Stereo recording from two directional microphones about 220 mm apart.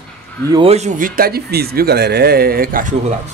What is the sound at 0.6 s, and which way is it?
Speech, 30° right (ahead or behind).